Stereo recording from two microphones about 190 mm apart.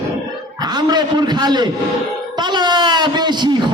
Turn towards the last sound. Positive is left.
turn(degrees=-25)  # may be behind; listen again after turning